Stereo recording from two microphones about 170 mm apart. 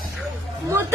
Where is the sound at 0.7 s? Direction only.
15° right (ahead or behind).